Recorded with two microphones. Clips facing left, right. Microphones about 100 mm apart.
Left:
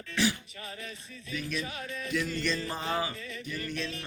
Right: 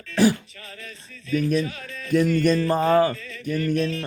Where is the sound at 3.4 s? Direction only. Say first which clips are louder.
Right 14 dB; 50° right (ahead or behind).